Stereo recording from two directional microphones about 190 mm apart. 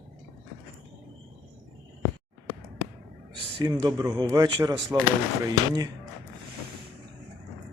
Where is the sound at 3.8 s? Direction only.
20° right (ahead or behind).